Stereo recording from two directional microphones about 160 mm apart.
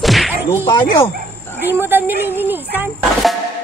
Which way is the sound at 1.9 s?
10° right (ahead or behind).